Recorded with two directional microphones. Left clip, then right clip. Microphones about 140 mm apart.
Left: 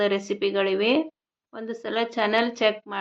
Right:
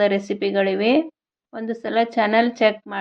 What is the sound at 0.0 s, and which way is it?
A woman's voice, 35° right (ahead or behind).